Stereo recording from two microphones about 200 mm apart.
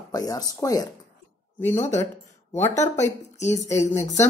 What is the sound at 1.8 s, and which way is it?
Speech, 35° left (ahead or behind).